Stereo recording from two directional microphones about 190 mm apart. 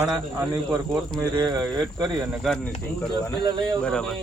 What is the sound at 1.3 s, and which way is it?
Speech, 20° right (ahead or behind).